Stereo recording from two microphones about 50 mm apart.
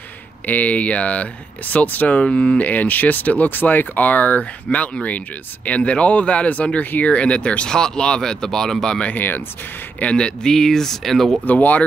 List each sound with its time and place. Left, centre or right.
0.5 s speech: left
2.6 s speech: left; by 9.1 s centre
9.1 s speech: left
10.1 s speech: centre
11.4 s speech: left